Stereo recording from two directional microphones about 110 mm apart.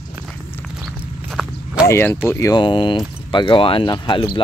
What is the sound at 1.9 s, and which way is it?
Speech, 20° left (ahead or behind).